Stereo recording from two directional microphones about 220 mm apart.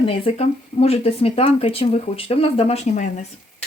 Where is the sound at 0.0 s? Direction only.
30° left (ahead or behind).